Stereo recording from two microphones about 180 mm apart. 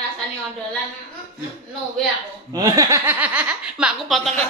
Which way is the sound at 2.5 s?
20° right (ahead or behind).